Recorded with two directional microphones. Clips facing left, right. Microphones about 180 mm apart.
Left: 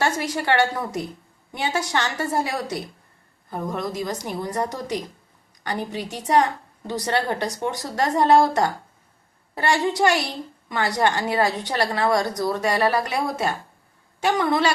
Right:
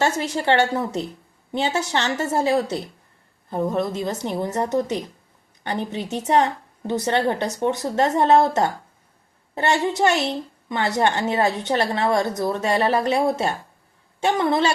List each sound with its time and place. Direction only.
0.0 s a woman's voice: 25° right (ahead or behind)